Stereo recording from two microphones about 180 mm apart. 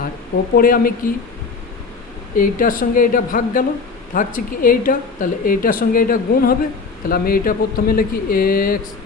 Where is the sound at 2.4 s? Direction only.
50° left (ahead or behind).